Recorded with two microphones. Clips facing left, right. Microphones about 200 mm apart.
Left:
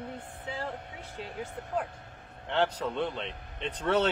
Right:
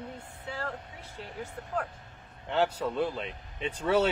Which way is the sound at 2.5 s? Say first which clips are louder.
Right 1 dB; 5° right (ahead or behind).